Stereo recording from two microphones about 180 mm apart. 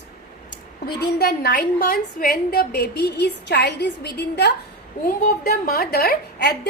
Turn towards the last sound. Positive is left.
turn(degrees=65)  # may be behind; listen again after turning